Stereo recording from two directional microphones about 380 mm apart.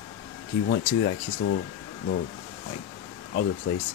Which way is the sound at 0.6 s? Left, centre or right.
Left.